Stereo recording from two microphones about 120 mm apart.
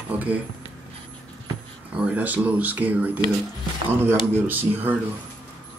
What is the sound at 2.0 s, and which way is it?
Speech, 15° right (ahead or behind).